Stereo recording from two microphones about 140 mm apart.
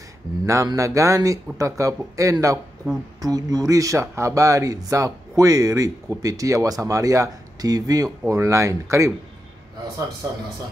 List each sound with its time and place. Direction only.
0.5 s speech: 20° right (ahead or behind)